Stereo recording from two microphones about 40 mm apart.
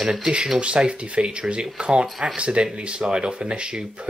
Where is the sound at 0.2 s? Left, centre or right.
Right.